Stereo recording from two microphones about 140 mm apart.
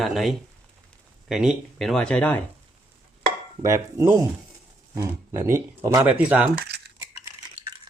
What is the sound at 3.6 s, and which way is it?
Cutlery, 20° right (ahead or behind).